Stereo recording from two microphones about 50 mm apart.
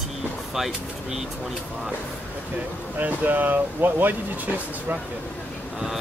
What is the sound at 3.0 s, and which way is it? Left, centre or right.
Speech, right.